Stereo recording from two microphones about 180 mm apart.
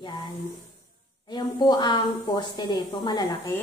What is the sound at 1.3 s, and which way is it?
Speech, 25° left (ahead or behind).